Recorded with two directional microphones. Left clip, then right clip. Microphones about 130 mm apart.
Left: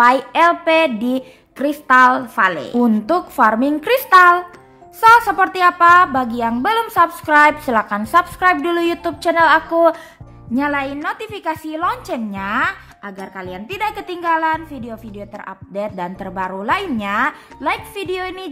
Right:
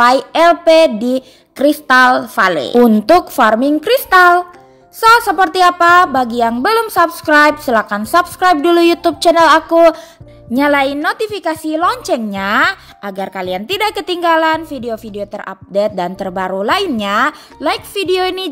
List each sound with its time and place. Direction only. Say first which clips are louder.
0.0 s a woman's voice: right 3 dB; 30° right (ahead or behind)
1.6 s speech: right 3 dB; 40° right (ahead or behind)
2.4 s a woman's voice: right 7 dB; 45° right (ahead or behind)
3.3 s a woman's voice: right 4 dB; 25° right (ahead or behind)
8.7 s speech: right 8 dB; 40° right (ahead or behind)
10.5 s a woman's voice: right 7 dB; 55° right (ahead or behind)